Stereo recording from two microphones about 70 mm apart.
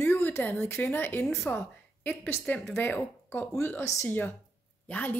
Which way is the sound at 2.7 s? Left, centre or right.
Left.